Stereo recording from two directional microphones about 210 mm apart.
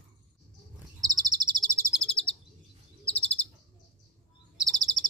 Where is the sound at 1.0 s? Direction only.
20° right (ahead or behind).